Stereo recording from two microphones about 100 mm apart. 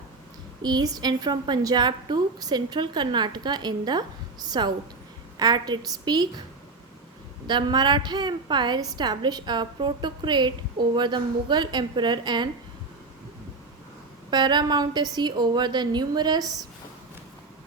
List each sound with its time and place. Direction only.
0.6 s a woman's voice: 45° right (ahead or behind)
7.4 s a woman's voice: 50° right (ahead or behind)
14.3 s a woman's voice: 50° right (ahead or behind)